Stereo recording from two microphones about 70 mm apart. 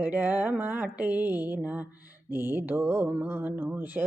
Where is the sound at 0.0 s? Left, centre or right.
Right.